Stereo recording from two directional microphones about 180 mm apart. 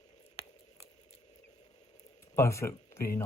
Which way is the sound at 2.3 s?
15° left (ahead or behind).